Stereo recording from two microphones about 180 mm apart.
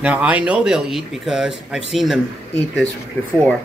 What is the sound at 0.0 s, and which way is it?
Speech, 5° right (ahead or behind).